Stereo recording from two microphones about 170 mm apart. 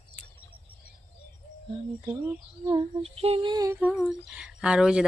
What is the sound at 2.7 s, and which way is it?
Female singing, 30° right (ahead or behind).